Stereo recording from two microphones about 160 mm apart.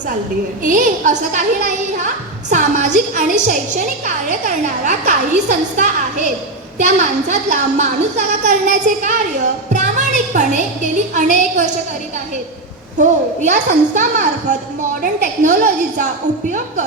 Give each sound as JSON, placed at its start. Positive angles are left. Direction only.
{"t": 0.6, "sound": "a woman's voice", "side_deg": -55}
{"t": 9.0, "sound": "a sound", "side_deg": -50}
{"t": 11.1, "sound": "a woman's voice", "side_deg": -50}
{"t": 13.0, "sound": "a woman's voice", "side_deg": -50}